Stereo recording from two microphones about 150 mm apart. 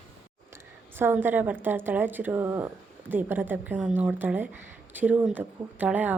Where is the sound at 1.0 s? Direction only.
15° right (ahead or behind).